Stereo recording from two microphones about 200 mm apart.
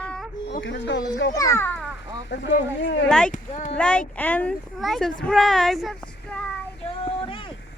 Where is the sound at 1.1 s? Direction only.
60° left (ahead or behind).